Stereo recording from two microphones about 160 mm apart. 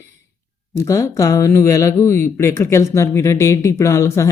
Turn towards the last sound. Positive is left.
turn(degrees=20)  # may be behind; listen again after turning